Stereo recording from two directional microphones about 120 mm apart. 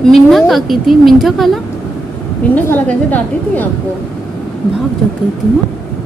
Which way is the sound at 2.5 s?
15° left (ahead or behind).